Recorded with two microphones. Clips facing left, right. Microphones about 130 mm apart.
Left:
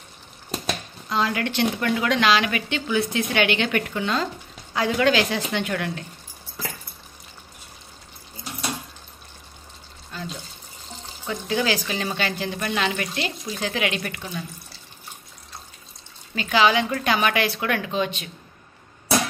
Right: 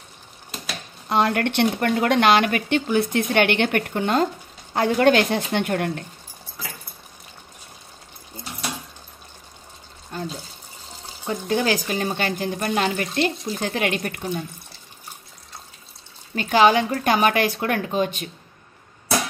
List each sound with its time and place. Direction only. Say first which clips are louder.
1.0 s speech: right 4 dB; 60° right (ahead or behind)
10.1 s water: right 4 dB; 45° right (ahead or behind)
11.2 s speech: right 2 dB; 45° right (ahead or behind)
16.3 s speech: right 3 dB; 45° right (ahead or behind)